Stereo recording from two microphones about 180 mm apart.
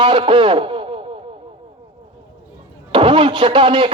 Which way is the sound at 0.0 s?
25° right (ahead or behind).